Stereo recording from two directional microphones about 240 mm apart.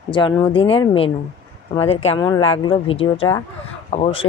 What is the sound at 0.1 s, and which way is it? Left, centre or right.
Speech, centre.